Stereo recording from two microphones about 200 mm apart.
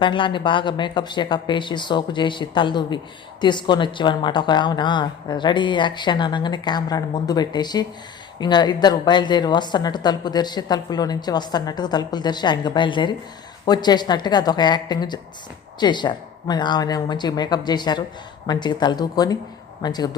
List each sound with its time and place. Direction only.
0.0 s a woman's voice: 25° left (ahead or behind)